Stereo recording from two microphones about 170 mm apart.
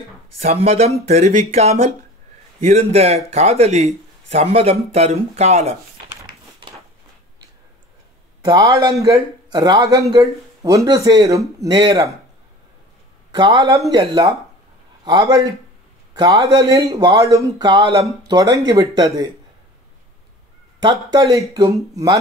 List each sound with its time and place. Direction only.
0.4 s a man's voice: 35° right (ahead or behind)
8.5 s a man's voice: 20° right (ahead or behind)
13.3 s a man's voice: 20° right (ahead or behind)
20.8 s a man's voice: 25° right (ahead or behind)